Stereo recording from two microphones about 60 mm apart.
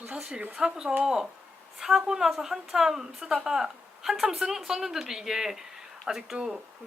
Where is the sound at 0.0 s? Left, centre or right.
Right.